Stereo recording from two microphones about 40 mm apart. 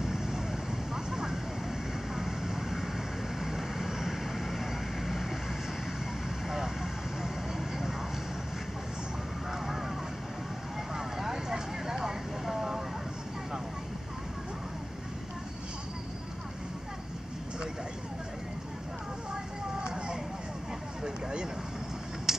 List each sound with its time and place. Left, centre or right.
0.0 s vehicle: centre
6.5 s vehicle: centre
11.0 s vehicle: centre
21.0 s a sound: centre
22.3 s vehicle: centre